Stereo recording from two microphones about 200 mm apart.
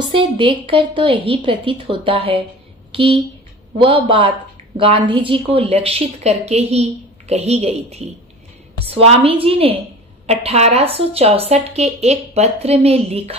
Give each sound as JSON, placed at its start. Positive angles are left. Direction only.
{"t": 0.1, "sound": "a woman's voice", "side_deg": -25}
{"t": 2.9, "sound": "a sound", "side_deg": -25}
{"t": 3.7, "sound": "a woman's voice", "side_deg": -25}